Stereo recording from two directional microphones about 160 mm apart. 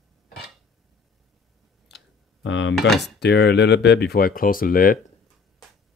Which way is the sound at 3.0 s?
90° left.